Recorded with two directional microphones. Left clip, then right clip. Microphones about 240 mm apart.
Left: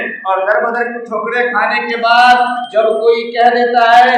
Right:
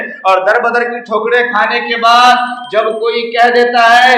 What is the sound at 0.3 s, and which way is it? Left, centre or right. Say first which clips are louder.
Speech: right 4 dB; right.